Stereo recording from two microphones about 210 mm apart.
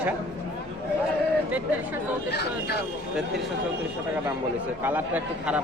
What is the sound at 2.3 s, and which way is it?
Speech, 50° left (ahead or behind).